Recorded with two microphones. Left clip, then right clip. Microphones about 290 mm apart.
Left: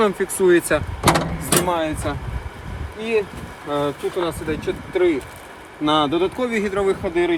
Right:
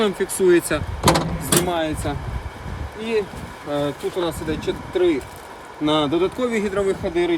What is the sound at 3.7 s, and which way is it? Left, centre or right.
Speech, centre.